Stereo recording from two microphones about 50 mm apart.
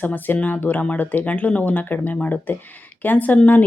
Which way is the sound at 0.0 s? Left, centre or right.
Left.